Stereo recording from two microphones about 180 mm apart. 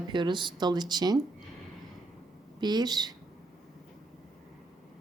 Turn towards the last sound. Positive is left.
turn(degrees=-25)  # may be behind; listen again after turning